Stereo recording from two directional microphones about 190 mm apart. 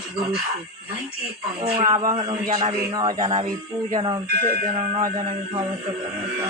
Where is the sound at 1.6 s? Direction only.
25° right (ahead or behind).